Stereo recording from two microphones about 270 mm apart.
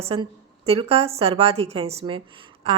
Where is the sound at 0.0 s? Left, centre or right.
Right.